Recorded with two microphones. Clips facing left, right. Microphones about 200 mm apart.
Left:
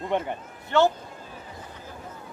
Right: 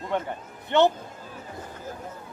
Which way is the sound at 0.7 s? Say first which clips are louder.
Right 1 dB; 20° right (ahead or behind).